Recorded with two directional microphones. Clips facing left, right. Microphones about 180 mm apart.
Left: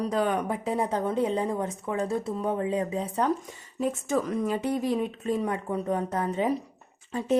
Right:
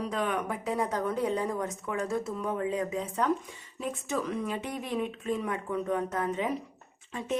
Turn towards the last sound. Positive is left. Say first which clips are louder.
# left 6 dB
turn(degrees=35)  # may be behind; listen again after turning